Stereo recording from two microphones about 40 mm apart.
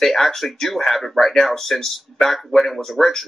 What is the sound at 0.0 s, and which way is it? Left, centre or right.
Speech, centre.